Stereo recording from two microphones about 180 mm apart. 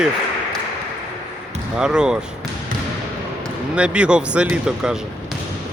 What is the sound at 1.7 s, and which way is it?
Speech, 5° right (ahead or behind).